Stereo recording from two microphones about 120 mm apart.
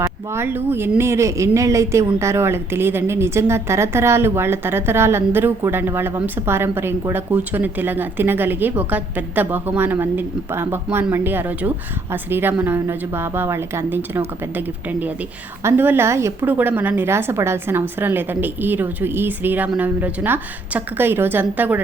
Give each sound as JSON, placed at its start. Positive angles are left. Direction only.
{"t": 0.0, "sound": "a woman's voice", "side_deg": -20}